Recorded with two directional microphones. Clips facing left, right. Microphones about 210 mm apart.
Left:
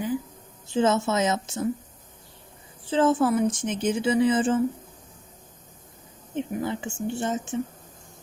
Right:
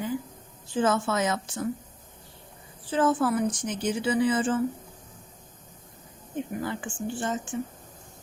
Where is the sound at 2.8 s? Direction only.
25° left (ahead or behind).